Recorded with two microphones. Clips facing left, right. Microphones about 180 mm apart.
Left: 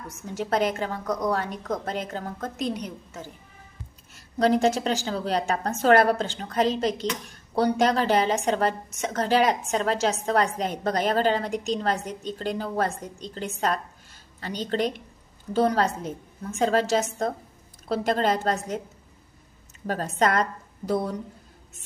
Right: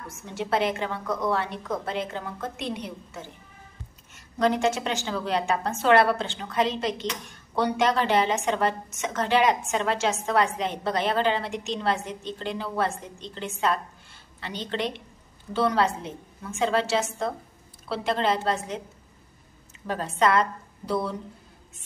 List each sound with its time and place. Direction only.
0.1 s a woman's voice: 40° left (ahead or behind)
19.9 s a woman's voice: 45° left (ahead or behind)